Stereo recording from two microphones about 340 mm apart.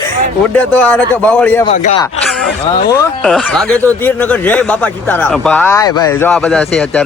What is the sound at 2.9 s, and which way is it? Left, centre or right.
Speech, centre.